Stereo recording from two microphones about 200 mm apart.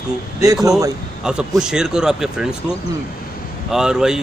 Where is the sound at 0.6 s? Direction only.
15° right (ahead or behind).